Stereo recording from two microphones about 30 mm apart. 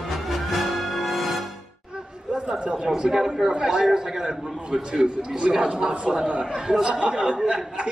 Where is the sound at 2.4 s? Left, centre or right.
Right.